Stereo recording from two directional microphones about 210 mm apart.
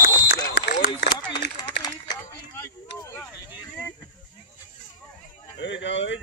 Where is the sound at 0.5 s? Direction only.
55° left (ahead or behind).